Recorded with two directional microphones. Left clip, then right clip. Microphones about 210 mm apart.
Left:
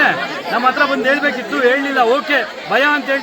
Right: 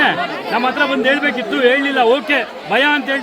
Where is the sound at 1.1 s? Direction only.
30° right (ahead or behind).